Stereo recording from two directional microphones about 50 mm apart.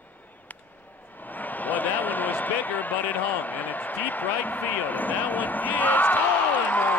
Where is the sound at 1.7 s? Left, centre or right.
Left.